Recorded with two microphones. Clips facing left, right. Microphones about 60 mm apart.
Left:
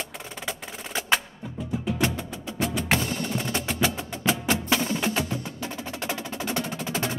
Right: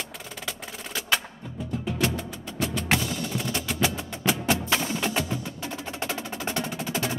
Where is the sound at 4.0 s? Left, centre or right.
Centre.